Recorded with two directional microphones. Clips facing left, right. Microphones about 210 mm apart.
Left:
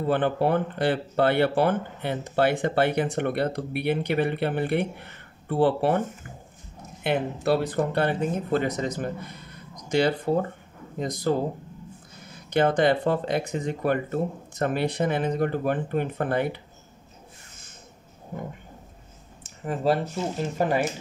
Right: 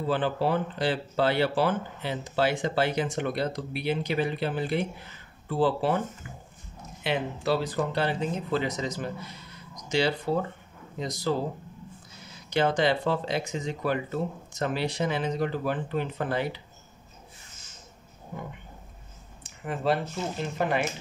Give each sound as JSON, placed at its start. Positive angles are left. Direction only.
{"t": 0.0, "sound": "speech", "side_deg": 55}
{"t": 19.6, "sound": "speech", "side_deg": 35}